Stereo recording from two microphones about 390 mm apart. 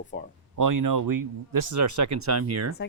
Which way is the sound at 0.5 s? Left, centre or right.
Right.